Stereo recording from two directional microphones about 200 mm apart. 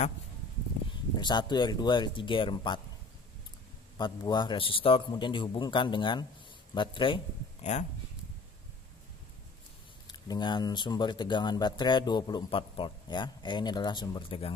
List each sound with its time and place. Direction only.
1.2 s speech: 20° left (ahead or behind)
4.0 s speech: 20° left (ahead or behind)
7.7 s speech: 35° left (ahead or behind)
10.0 s speech: 20° left (ahead or behind)